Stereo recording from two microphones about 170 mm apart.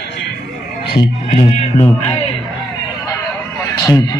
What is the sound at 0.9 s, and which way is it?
Music, 35° left (ahead or behind).